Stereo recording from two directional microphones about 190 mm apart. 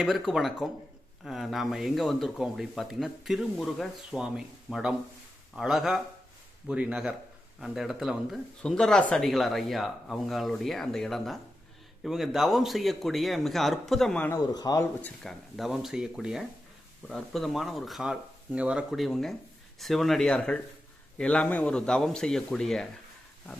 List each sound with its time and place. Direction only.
0.0 s speech: centre (ahead or behind)
14.3 s speech: 20° left (ahead or behind)
15.0 s speech: centre (ahead or behind)